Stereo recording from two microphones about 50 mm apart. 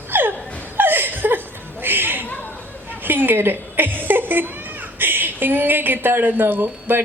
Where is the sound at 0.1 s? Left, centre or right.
Right.